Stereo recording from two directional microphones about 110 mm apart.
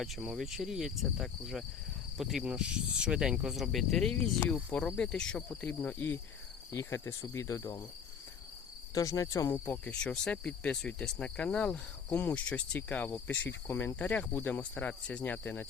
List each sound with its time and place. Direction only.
0.0 s speech: centre (ahead or behind); by 6.1 s 15° left (ahead or behind)
6.7 s speech: 25° left (ahead or behind)
9.0 s speech: 30° left (ahead or behind)
9.6 s speech: 10° left (ahead or behind)